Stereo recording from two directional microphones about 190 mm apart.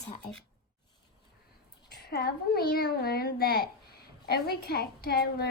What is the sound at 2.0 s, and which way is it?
A woman's voice, 55° left (ahead or behind).